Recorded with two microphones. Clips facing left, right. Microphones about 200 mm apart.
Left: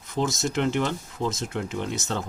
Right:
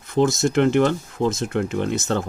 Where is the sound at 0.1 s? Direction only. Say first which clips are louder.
Right 8 dB; 55° right (ahead or behind).